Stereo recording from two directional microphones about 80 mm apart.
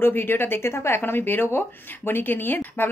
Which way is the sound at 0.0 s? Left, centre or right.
Left.